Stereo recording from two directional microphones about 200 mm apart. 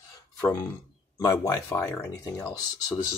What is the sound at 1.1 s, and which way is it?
Speech, 15° left (ahead or behind).